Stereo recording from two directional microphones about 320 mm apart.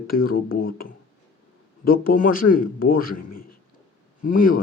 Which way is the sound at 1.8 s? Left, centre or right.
Left.